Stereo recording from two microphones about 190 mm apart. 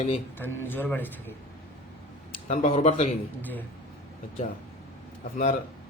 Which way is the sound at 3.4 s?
10° left (ahead or behind).